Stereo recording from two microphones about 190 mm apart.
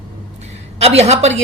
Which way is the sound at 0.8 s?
35° right (ahead or behind).